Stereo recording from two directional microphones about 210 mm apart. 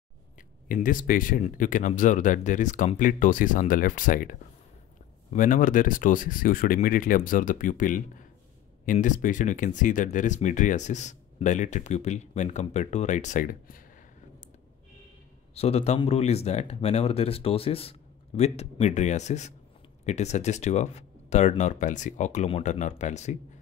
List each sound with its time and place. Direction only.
0.4 s speech: 40° left (ahead or behind)
15.5 s speech: 30° left (ahead or behind)